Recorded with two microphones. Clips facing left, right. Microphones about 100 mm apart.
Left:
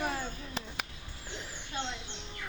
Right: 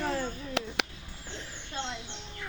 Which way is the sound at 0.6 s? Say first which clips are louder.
Right 8 dB; 70° right (ahead or behind).